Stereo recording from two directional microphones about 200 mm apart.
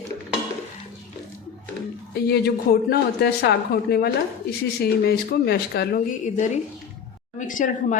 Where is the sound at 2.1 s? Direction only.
55° left (ahead or behind).